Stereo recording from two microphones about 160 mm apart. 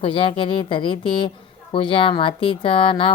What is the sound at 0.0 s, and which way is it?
Speech, 35° left (ahead or behind).